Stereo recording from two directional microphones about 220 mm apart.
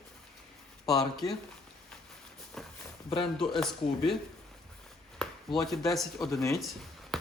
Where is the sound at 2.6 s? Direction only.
Centre (ahead or behind).